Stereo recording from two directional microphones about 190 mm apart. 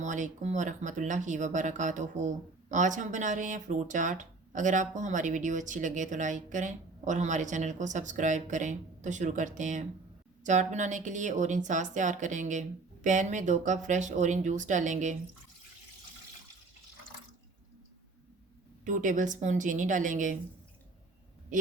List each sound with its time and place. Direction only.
0.0 s speech: 40° right (ahead or behind)
18.9 s speech: 40° right (ahead or behind)